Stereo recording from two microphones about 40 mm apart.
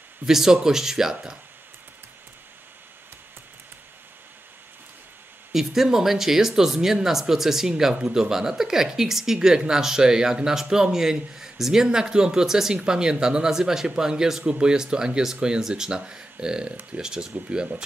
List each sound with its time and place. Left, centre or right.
0.3 s a woman's voice: centre
5.5 s a woman's voice: centre